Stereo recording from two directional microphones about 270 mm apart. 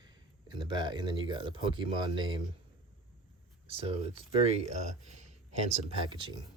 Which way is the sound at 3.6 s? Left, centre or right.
Right.